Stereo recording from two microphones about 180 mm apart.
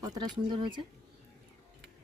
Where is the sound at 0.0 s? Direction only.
20° right (ahead or behind).